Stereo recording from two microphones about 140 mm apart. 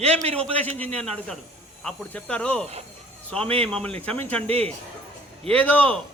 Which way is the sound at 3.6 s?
5° left (ahead or behind).